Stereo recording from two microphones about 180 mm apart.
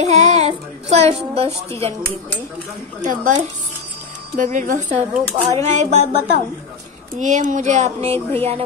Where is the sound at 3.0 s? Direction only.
45° right (ahead or behind).